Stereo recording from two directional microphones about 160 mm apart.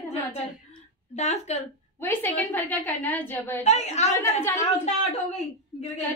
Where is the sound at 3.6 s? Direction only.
45° left (ahead or behind).